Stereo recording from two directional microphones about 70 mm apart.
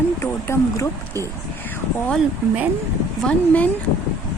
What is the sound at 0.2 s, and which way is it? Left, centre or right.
Speech, left.